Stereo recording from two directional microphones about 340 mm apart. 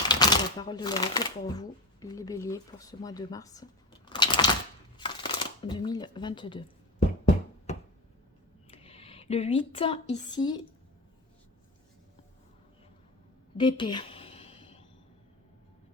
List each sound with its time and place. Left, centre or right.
0.0 s speech: centre
4.9 s shuffling cards: centre
8.7 s speech: centre
13.6 s a sound: centre